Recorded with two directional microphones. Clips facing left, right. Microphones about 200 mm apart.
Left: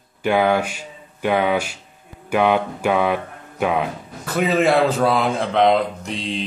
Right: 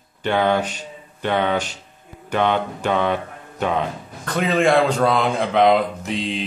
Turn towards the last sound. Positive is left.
turn(degrees=0)  # may be behind; listen again after turning